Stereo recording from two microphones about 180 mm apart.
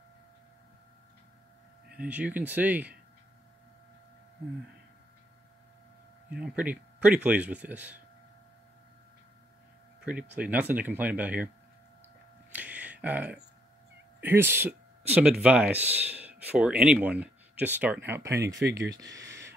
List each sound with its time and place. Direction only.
2.0 s speech: 5° right (ahead or behind)
6.3 s speech: 5° right (ahead or behind)
10.0 s speech: 5° right (ahead or behind)
12.5 s a sound: 10° right (ahead or behind)
14.2 s speech: 10° right (ahead or behind)
18.5 s speech: 80° right
19.1 s a sound: 15° right (ahead or behind)